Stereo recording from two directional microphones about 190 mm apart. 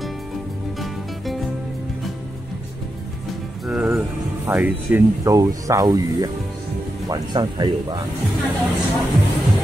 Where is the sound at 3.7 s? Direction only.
5° right (ahead or behind); by 7.9 s 25° right (ahead or behind).